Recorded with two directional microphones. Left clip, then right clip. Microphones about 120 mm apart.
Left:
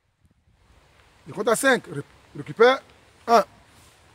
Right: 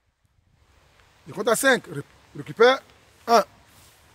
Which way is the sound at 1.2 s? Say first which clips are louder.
Even; 40° right (ahead or behind).